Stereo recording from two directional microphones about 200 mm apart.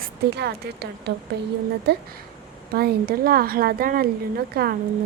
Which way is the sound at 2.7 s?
50° right (ahead or behind).